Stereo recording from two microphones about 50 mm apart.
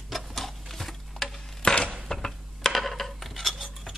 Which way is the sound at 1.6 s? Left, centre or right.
Centre.